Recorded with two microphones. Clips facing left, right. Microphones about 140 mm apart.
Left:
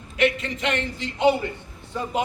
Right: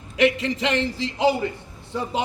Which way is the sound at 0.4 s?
30° right (ahead or behind).